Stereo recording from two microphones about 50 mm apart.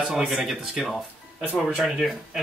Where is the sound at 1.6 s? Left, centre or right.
Centre.